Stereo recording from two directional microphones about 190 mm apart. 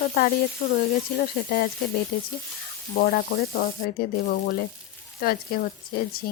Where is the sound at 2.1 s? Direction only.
55° left (ahead or behind).